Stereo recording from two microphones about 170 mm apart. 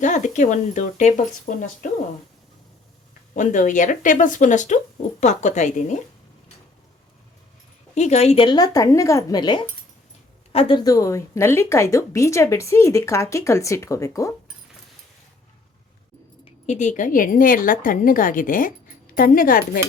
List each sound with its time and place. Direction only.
0.0 s a woman's voice: 45° left (ahead or behind)
3.3 s a woman's voice: 45° left (ahead or behind)
7.9 s a woman's voice: 40° left (ahead or behind); by 14.3 s 15° left (ahead or behind)
16.4 s a woman's voice: 45° left (ahead or behind)